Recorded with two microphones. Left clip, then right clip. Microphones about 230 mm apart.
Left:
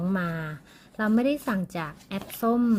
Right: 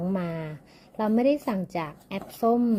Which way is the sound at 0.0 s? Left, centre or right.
Left.